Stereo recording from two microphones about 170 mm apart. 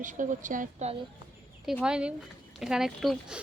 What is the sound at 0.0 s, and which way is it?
Speech, 50° right (ahead or behind).